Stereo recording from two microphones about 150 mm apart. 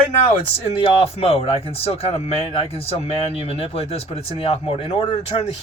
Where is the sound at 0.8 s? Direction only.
40° left (ahead or behind).